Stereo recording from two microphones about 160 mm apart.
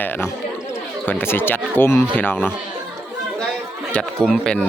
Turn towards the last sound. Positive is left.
turn(degrees=5)  # may be behind; listen again after turning